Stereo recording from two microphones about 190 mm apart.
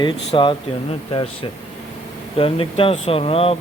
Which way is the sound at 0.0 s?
25° left (ahead or behind).